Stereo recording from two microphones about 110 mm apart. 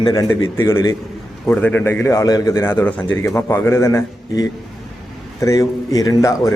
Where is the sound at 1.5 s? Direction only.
15° left (ahead or behind).